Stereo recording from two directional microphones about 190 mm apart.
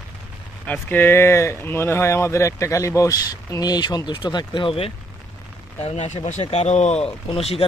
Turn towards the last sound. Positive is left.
turn(degrees=30)  # may be behind; listen again after turning